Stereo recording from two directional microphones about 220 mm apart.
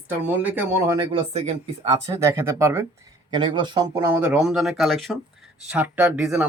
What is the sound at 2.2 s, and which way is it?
Speech, 15° right (ahead or behind).